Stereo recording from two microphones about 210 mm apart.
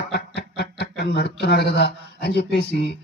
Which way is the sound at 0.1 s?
50° left (ahead or behind).